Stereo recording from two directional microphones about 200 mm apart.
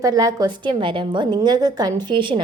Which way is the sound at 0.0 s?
20° right (ahead or behind).